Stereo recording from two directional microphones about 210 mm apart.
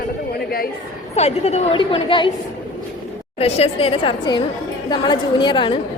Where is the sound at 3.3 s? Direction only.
30° left (ahead or behind).